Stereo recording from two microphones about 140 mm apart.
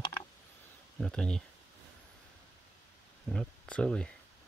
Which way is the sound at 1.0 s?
5° left (ahead or behind).